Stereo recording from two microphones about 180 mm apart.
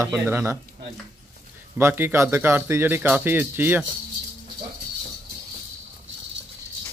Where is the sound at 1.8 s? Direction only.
10° right (ahead or behind).